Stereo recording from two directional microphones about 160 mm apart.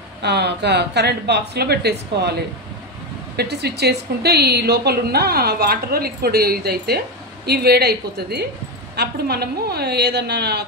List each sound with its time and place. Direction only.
0.2 s speech: 90° right
3.3 s a woman's voice: 90° right